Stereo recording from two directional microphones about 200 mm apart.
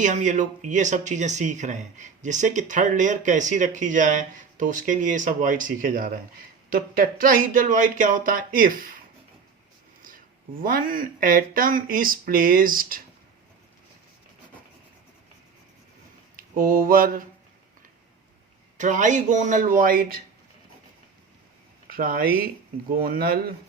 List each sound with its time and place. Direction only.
0.0 s speech: 40° right (ahead or behind)
10.0 s speech: 45° right (ahead or behind)
16.3 s mantra: 45° right (ahead or behind)
18.8 s speech: 40° right (ahead or behind)
21.8 s speech: 45° right (ahead or behind)